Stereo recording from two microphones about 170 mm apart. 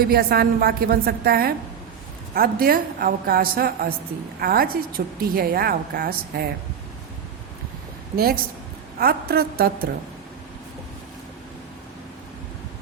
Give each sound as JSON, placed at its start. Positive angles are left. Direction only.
{"t": 0.0, "sound": "a woman's voice", "side_deg": -65}
{"t": 8.1, "sound": "a woman's voice", "side_deg": -65}